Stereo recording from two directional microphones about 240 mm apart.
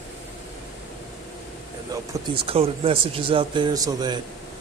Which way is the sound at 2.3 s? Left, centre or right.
Right.